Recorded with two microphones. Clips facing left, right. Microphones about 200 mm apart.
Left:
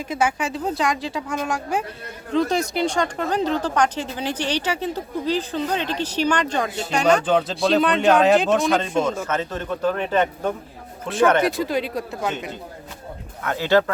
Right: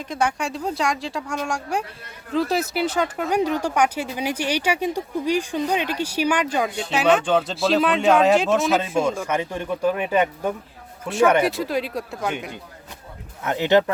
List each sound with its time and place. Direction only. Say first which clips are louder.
0.0 s speech: left 1 dB; 5° left (ahead or behind)
13.4 s speech: right 1 dB; 20° right (ahead or behind)